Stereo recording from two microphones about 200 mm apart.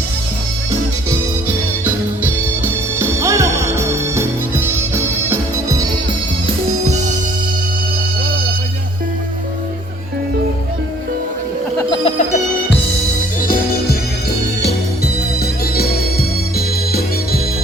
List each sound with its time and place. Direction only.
1.8 s music: 10° right (ahead or behind)
11.8 s music: 25° left (ahead or behind)
14.6 s music: 50° left (ahead or behind)